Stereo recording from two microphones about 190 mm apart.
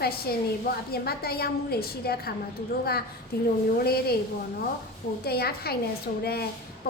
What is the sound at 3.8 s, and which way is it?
Speech, 55° left (ahead or behind).